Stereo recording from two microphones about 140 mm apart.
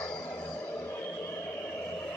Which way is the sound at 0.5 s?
15° left (ahead or behind).